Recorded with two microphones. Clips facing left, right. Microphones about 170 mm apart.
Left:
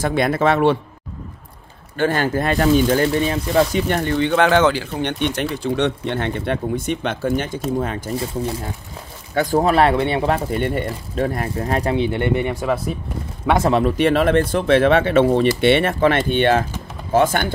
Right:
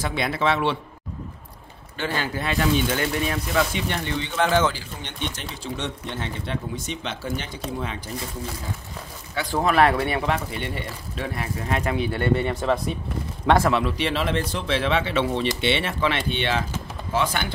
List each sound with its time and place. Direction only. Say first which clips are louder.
0.0 s speech: left 7 dB; 50° left (ahead or behind)
2.0 s speech: left 9 dB; 50° left (ahead or behind); by 3.8 s 30° left (ahead or behind)
3.9 s speech: left 9 dB; 50° left (ahead or behind)
9.3 s speech: left 6 dB; 45° left (ahead or behind); by 12.9 s 5° left (ahead or behind)
13.7 s speech: left 7 dB; 40° left (ahead or behind)